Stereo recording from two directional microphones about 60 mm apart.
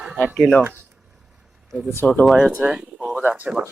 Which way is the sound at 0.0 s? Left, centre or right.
Centre.